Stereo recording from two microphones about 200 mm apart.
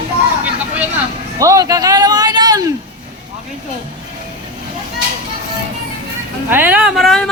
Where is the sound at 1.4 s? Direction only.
15° right (ahead or behind).